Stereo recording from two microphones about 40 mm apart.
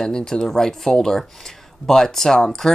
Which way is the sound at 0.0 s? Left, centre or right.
Centre.